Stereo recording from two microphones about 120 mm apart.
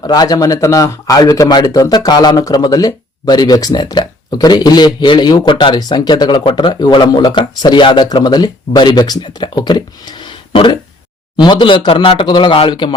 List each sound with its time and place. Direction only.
0.0 s a man's voice: 35° left (ahead or behind)